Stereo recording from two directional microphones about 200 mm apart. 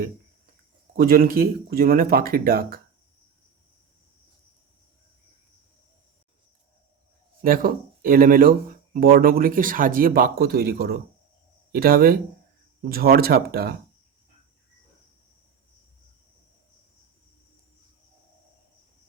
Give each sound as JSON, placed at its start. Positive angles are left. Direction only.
{"t": 0.9, "sound": "speech", "side_deg": -45}
{"t": 7.4, "sound": "speech", "side_deg": -45}